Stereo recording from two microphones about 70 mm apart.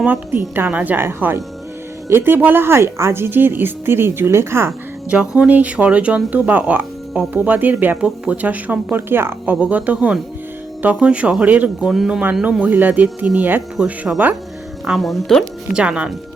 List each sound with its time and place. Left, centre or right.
0.0 s speech: right
1.0 s a woman's voice: right
5.1 s speech: centre; by 9.6 s right
9.6 s speech: right
11.9 s speech: centre
12.2 s speech: centre
13.8 s speech: centre
14.8 s speech: centre
15.7 s speech: centre